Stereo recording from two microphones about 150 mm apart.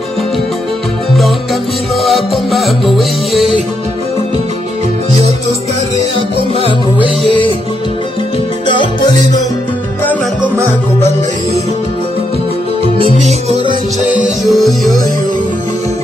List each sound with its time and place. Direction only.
1.1 s music: centre (ahead or behind)
12.8 s music: 40° right (ahead or behind)
14.0 s music: 5° right (ahead or behind)